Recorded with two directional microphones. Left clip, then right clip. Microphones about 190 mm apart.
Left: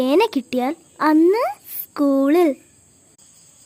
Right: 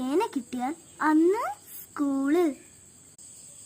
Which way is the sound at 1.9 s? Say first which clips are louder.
Left 10 dB; 40° left (ahead or behind).